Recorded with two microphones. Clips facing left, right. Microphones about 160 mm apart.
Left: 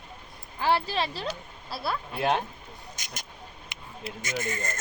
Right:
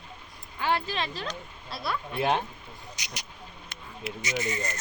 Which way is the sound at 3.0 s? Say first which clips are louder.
Right 1 dB; 50° left (ahead or behind).